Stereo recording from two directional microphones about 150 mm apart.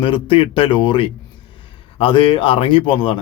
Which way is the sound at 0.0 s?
35° left (ahead or behind).